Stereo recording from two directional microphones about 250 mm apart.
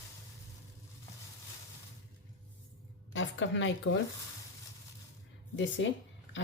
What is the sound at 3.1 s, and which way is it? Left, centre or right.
Speech, left.